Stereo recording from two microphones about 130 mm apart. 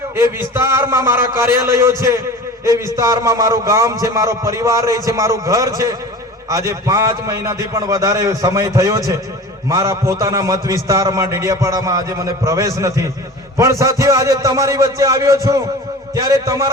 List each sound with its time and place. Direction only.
0.2 s a man's voice: 20° right (ahead or behind)